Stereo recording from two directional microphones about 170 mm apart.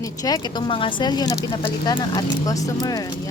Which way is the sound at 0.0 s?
20° left (ahead or behind).